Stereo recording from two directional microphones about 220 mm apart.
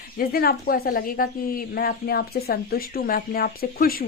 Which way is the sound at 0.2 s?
45° left (ahead or behind).